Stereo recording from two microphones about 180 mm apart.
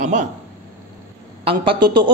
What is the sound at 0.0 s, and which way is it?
Speech, 40° right (ahead or behind).